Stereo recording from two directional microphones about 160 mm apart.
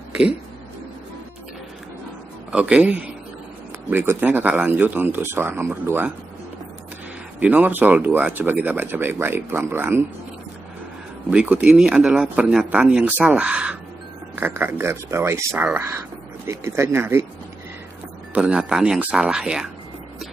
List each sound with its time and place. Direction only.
2.5 s speech: 5° right (ahead or behind)
7.3 s speech: 10° right (ahead or behind)
11.2 s speech: 5° right (ahead or behind)
18.3 s speech: 5° right (ahead or behind)